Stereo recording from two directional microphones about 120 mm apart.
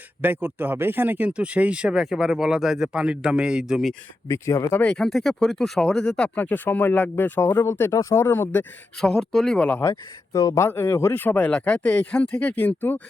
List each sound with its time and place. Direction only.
0.2 s speech: 15° right (ahead or behind)
4.3 s speech: 25° left (ahead or behind)
4.8 s speech: 5° left (ahead or behind)
9.0 s speech: 5° left (ahead or behind)
9.9 s speech: 25° left (ahead or behind)